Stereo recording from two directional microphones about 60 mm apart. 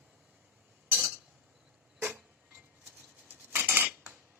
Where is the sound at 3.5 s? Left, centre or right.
Right.